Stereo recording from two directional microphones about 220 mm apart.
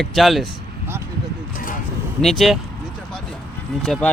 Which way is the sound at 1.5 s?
40° left (ahead or behind).